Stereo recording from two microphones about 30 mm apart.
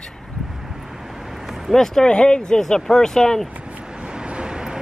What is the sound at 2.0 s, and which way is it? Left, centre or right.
Speech, left.